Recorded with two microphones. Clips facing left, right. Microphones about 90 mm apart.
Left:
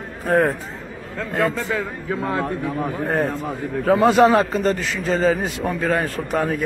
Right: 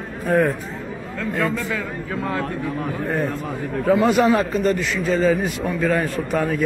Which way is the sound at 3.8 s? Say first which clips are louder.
Left 2 dB; 30° left (ahead or behind).